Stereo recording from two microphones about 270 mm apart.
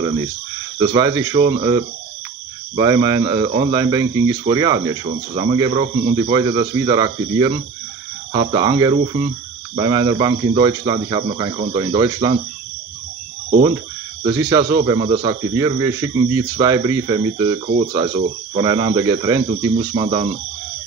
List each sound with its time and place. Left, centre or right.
0.7 s speech: centre
14.2 s speech: centre